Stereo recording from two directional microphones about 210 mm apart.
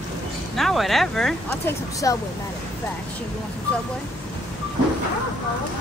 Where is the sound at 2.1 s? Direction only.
15° left (ahead or behind).